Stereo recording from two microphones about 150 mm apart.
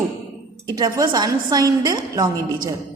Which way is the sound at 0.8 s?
25° right (ahead or behind).